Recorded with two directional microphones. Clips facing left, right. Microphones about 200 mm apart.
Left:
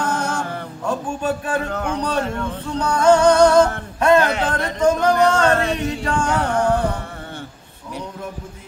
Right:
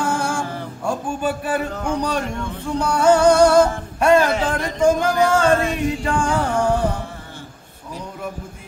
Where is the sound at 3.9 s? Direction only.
10° right (ahead or behind).